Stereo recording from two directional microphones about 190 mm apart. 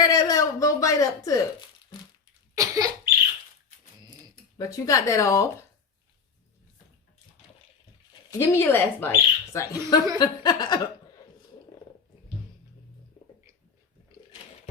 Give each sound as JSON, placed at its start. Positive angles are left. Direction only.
{"t": 0.0, "sound": "a sound", "side_deg": 20}
{"t": 2.6, "sound": "cough", "side_deg": -20}
{"t": 4.5, "sound": "speech", "side_deg": 20}
{"t": 8.3, "sound": "speech", "side_deg": 15}